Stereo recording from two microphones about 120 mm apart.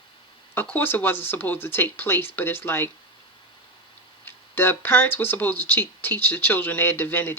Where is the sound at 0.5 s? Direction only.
15° left (ahead or behind).